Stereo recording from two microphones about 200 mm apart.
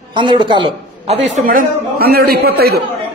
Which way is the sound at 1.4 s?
45° right (ahead or behind).